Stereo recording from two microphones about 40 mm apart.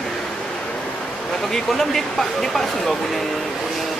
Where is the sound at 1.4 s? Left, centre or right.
Centre.